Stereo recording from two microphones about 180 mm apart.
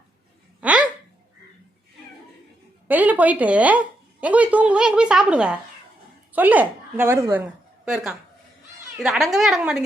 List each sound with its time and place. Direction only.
0.6 s hiccup: 5° right (ahead or behind)
2.8 s a woman's voice: 10° right (ahead or behind)
7.9 s a woman's voice: 5° right (ahead or behind)